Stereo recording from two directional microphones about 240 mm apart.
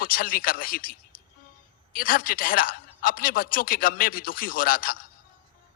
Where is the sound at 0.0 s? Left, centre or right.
Left.